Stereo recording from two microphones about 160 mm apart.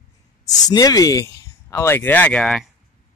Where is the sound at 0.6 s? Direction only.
25° left (ahead or behind); by 2.7 s 5° left (ahead or behind).